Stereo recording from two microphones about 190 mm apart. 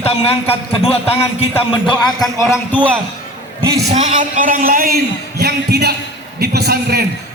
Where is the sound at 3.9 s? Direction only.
40° right (ahead or behind).